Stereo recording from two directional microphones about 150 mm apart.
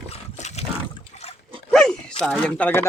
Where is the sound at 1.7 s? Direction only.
Centre (ahead or behind).